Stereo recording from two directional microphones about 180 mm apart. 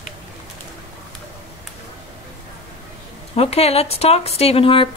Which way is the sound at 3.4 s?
35° left (ahead or behind).